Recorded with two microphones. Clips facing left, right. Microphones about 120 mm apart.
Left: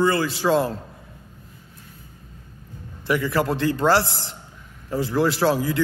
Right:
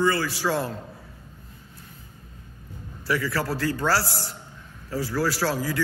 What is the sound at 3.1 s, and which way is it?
A man's voice, 20° left (ahead or behind).